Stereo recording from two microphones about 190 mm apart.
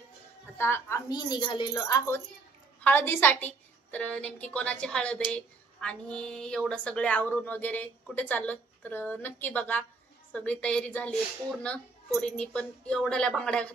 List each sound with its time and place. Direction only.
0.6 s a woman's voice: 15° left (ahead or behind)